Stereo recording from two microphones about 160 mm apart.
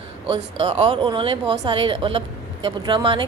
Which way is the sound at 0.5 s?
40° right (ahead or behind).